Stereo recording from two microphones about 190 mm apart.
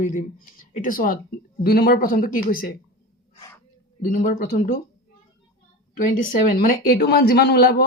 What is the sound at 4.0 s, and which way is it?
Speech, 45° left (ahead or behind).